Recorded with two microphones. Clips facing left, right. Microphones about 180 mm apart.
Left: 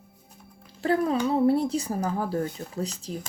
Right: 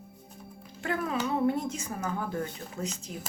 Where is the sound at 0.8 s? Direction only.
35° left (ahead or behind).